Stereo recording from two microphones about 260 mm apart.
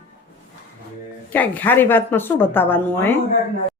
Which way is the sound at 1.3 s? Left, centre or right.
Centre.